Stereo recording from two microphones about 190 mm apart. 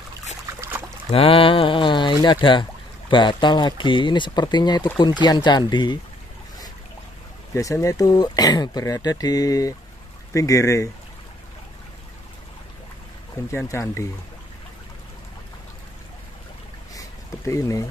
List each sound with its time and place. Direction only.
0.6 s boat: 10° right (ahead or behind)
1.1 s speech: 30° left (ahead or behind)
7.5 s speech: 15° left (ahead or behind)
13.5 s speech: 15° left (ahead or behind)
17.5 s speech: 15° left (ahead or behind)